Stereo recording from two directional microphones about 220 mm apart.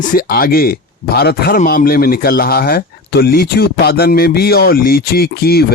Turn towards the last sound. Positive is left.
turn(degrees=45)  # may be behind; listen again after turning